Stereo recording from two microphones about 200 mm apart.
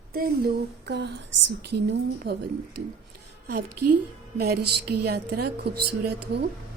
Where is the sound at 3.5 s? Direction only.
50° right (ahead or behind).